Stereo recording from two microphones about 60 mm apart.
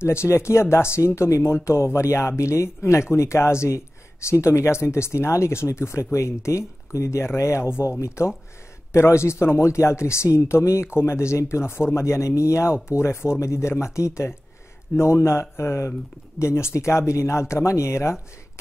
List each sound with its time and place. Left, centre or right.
0.0 s speech: left